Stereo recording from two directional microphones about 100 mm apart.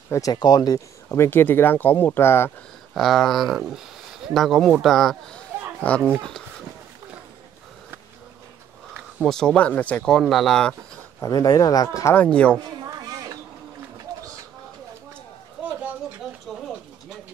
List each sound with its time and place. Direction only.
0.1 s speech: 40° left (ahead or behind)
1.0 s speech: 25° left (ahead or behind)
2.9 s speech: centre (ahead or behind)
9.2 s speech: 5° left (ahead or behind)
11.2 s speech: 40° left (ahead or behind)
12.2 s speech: 10° left (ahead or behind)
12.8 s a sound: 40° right (ahead or behind)
16.5 s pigeon: centre (ahead or behind)